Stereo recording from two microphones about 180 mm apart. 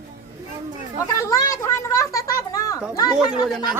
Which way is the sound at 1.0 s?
20° left (ahead or behind).